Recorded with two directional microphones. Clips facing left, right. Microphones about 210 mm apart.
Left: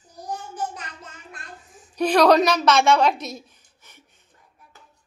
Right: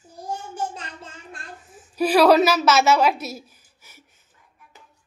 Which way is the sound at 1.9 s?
5° right (ahead or behind).